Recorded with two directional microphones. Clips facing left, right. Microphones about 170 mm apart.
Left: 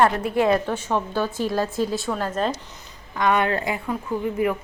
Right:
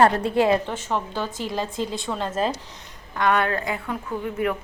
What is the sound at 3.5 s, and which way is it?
Speech, 25° left (ahead or behind).